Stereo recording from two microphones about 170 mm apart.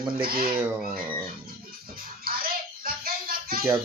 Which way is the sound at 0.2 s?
60° right (ahead or behind).